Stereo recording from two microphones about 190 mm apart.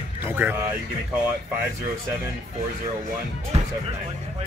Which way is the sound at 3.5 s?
30° right (ahead or behind).